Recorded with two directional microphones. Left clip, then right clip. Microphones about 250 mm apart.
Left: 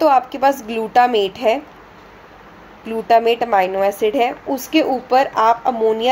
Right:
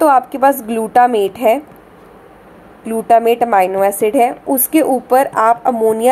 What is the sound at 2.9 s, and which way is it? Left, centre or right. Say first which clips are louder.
A woman's voice: right 3 dB; centre.